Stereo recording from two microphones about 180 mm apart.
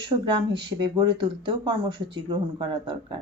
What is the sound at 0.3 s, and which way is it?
Speech, 25° right (ahead or behind).